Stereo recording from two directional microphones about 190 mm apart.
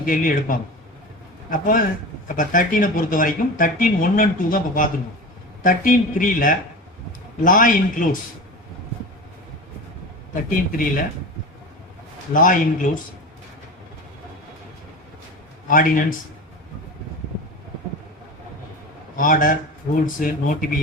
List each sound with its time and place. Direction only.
0.0 s speech: 45° left (ahead or behind)
10.7 s speech: 45° left (ahead or behind)
12.3 s speech: 45° left (ahead or behind)
15.6 s speech: 45° left (ahead or behind)
19.1 s a man's voice: 45° left (ahead or behind)